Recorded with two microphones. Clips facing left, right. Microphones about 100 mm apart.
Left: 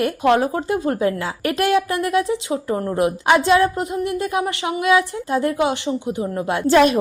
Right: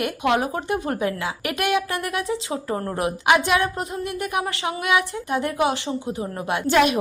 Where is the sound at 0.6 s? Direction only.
25° right (ahead or behind).